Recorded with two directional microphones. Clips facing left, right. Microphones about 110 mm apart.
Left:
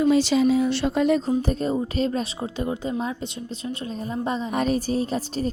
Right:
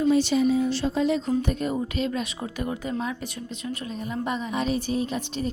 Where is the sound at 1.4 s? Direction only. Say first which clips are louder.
Left 2 dB; 35° left (ahead or behind).